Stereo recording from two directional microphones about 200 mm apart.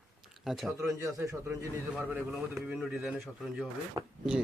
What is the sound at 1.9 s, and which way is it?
A man's voice, 5° right (ahead or behind).